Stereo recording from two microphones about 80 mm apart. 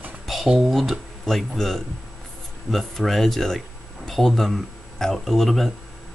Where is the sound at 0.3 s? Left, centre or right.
Centre.